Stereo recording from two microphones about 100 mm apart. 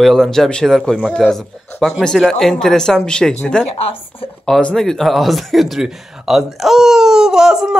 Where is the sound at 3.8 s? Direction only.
70° left (ahead or behind).